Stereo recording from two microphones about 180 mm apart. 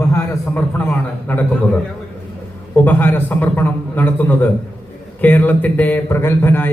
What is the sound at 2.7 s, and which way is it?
A man's voice, 10° left (ahead or behind).